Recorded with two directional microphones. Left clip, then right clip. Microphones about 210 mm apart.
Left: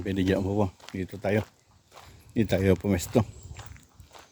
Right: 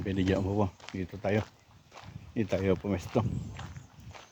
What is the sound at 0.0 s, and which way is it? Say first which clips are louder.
Speech: left 3 dB; 45° left (ahead or behind).